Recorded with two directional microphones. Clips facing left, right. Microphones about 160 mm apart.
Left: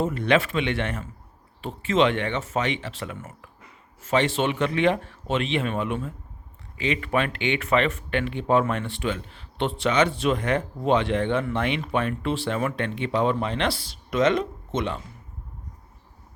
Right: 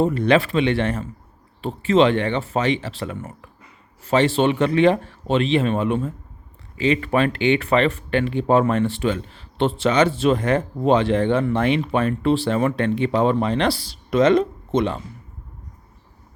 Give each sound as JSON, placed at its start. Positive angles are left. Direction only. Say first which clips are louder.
{"t": 0.0, "sound": "speech", "louder": "right 5 dB", "side_deg": -35}